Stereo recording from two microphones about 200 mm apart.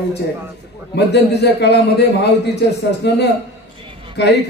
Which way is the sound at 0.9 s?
55° left (ahead or behind).